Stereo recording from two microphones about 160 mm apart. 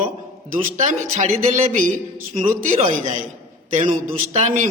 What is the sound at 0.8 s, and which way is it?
A woman's voice, 45° right (ahead or behind).